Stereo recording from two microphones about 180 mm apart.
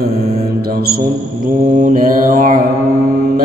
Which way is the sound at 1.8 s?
50° right (ahead or behind).